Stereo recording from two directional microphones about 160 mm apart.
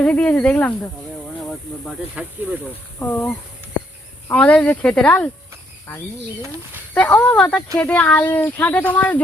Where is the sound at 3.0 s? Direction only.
10° left (ahead or behind).